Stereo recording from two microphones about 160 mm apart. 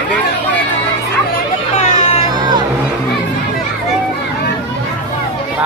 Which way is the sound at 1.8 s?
40° left (ahead or behind).